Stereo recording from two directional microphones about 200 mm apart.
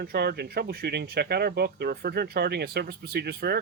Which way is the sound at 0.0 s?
55° right (ahead or behind).